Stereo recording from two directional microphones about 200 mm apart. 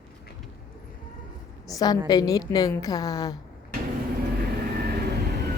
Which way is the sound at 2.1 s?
20° left (ahead or behind).